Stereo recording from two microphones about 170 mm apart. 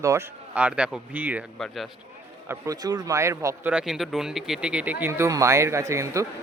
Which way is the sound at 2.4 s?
20° right (ahead or behind).